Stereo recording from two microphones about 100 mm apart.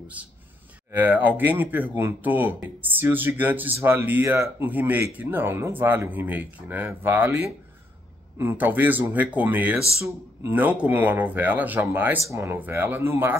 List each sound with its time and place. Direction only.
0.2 s speech: 15° right (ahead or behind)